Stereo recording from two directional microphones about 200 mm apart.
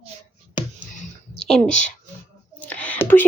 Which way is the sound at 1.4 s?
Centre (ahead or behind).